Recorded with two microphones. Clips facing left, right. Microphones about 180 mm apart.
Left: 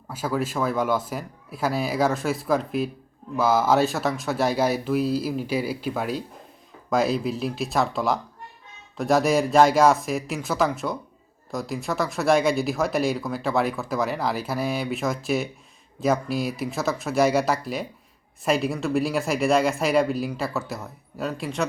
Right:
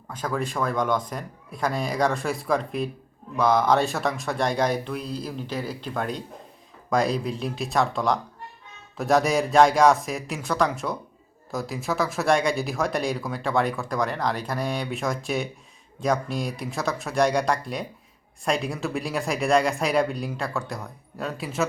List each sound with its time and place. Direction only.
0.1 s speech: 5° left (ahead or behind)